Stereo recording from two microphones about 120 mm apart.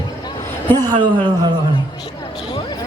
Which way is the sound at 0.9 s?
40° right (ahead or behind).